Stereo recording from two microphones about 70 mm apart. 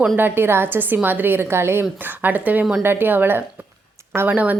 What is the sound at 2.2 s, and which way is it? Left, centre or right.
A woman's voice, right.